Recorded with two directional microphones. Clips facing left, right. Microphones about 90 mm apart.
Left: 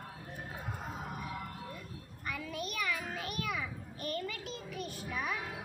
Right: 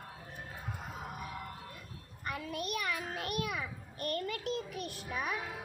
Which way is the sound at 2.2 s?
55° right (ahead or behind).